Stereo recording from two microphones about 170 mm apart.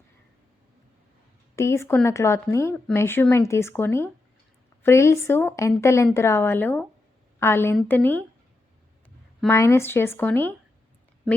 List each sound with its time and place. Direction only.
1.5 s a woman's voice: 15° left (ahead or behind)
9.5 s speech: 15° left (ahead or behind)